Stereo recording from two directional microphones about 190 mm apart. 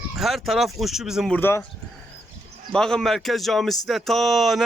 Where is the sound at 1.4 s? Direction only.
10° left (ahead or behind).